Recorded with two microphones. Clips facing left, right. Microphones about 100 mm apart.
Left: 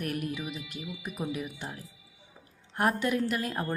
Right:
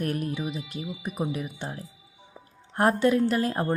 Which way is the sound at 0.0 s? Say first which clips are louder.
Right 4 dB; 30° right (ahead or behind).